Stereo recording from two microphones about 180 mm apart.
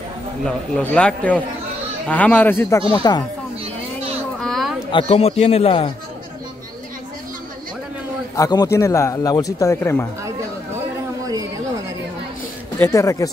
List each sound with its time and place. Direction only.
0.5 s a man's voice: 5° left (ahead or behind)
2.9 s speech: 25° left (ahead or behind)
4.4 s a sound: centre (ahead or behind)
4.9 s a man's voice: 35° left (ahead or behind)
8.4 s a man's voice: 20° left (ahead or behind)
12.7 s a man's voice: 15° left (ahead or behind)